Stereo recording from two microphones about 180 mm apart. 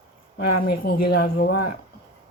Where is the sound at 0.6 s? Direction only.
60° left (ahead or behind).